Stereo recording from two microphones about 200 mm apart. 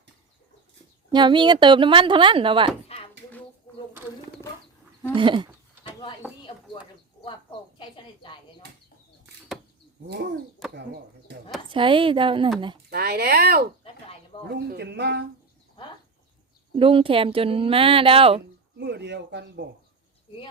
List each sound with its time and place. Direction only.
1.1 s speech: 25° right (ahead or behind)
5.1 s speech: 25° right (ahead or behind)
7.8 s speech: 25° left (ahead or behind)
10.8 s speech: 60° right (ahead or behind)
11.7 s speech: 25° right (ahead or behind)
12.9 s speech: 55° right (ahead or behind)
16.7 s speech: 25° right (ahead or behind)
18.8 s speech: 60° right (ahead or behind)